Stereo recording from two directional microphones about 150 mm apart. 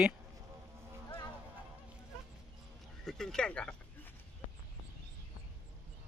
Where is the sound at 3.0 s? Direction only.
5° left (ahead or behind).